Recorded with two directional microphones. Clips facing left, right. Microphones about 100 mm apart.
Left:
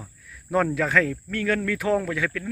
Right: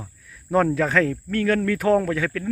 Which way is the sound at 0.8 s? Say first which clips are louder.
Right 2 dB; 30° right (ahead or behind).